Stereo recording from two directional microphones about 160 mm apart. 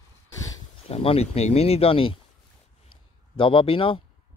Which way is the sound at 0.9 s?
40° left (ahead or behind).